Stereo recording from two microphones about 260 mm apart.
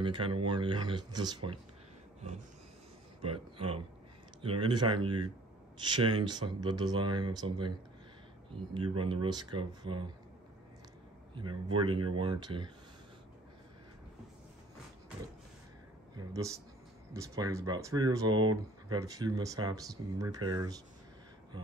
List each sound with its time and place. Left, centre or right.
0.0 s speech: centre
3.2 s a man's voice: right
8.7 s speech: centre
11.3 s speech: centre
16.2 s speech: centre